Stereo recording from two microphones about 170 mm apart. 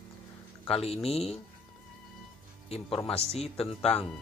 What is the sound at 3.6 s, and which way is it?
Speech, 5° left (ahead or behind).